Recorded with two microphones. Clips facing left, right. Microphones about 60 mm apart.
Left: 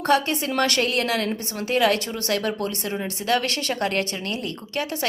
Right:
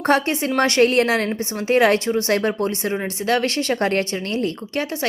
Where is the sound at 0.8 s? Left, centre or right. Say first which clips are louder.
Right 7 dB; right.